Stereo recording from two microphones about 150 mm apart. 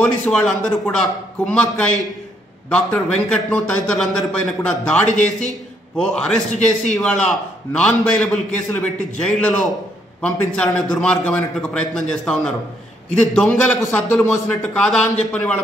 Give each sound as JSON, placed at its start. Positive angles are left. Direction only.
{"t": 0.3, "sound": "a man's voice", "side_deg": 5}
{"t": 6.5, "sound": "a man's voice", "side_deg": 55}
{"t": 7.0, "sound": "a man's voice", "side_deg": 5}